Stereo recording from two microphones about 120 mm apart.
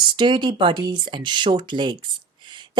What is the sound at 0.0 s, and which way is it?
Speech, 40° right (ahead or behind).